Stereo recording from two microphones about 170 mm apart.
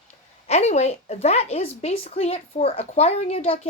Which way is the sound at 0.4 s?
40° left (ahead or behind).